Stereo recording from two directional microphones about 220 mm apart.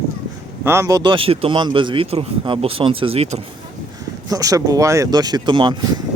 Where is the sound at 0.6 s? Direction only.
10° right (ahead or behind).